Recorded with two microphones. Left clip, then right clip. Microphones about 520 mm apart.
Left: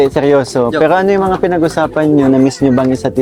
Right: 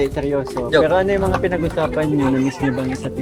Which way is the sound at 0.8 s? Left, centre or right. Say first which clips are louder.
Left 6 dB; left.